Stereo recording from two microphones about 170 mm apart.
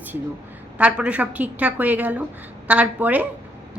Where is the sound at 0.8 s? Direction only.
5° right (ahead or behind).